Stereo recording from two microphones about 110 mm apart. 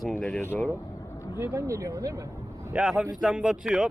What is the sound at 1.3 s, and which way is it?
Speech, 25° right (ahead or behind).